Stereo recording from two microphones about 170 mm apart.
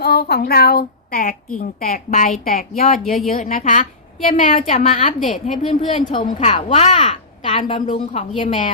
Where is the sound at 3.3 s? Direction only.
50° left (ahead or behind).